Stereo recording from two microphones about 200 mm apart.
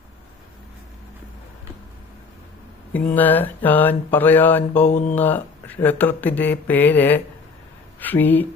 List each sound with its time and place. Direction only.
3.1 s speech: 10° left (ahead or behind)
4.9 s speech: 35° left (ahead or behind)
5.1 s speech: 10° left (ahead or behind)